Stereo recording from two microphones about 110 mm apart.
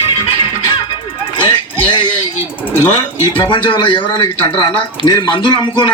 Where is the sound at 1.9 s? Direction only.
45° left (ahead or behind).